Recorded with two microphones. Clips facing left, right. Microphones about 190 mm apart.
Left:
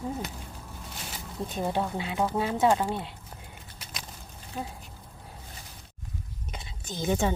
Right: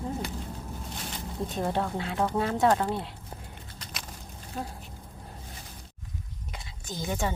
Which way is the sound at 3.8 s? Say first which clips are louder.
Even; centre (ahead or behind).